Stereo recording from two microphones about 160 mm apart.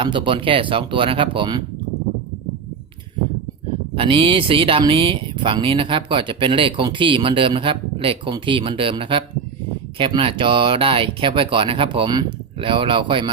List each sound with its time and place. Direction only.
0.0 s speech: 30° right (ahead or behind)
3.9 s speech: 35° right (ahead or behind)